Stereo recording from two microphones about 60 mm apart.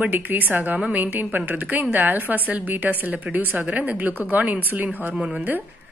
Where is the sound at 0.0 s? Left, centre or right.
Right.